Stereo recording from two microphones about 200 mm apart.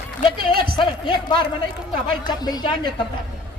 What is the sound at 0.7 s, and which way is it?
A man's voice, 25° left (ahead or behind).